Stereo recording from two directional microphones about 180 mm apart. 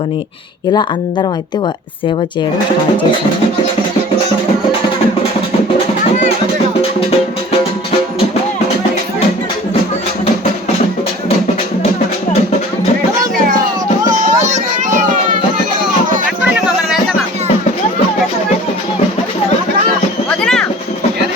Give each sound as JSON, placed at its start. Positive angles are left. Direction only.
{"t": 0.7, "sound": "speech", "side_deg": 25}
{"t": 14.1, "sound": "music", "side_deg": -40}
{"t": 20.4, "sound": "music", "side_deg": 5}